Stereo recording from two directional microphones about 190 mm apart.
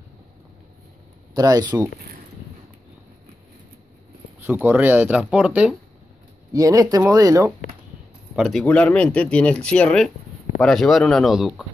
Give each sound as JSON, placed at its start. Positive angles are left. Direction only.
{"t": 1.3, "sound": "speech", "side_deg": -20}
{"t": 4.5, "sound": "speech", "side_deg": -10}
{"t": 6.5, "sound": "speech", "side_deg": -20}
{"t": 8.4, "sound": "speech", "side_deg": 0}